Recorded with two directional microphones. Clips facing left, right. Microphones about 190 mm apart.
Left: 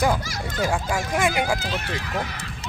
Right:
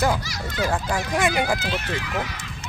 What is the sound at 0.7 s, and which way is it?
Speech, 10° left (ahead or behind).